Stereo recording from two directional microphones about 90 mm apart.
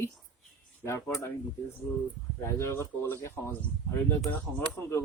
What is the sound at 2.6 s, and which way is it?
Speech, 30° left (ahead or behind).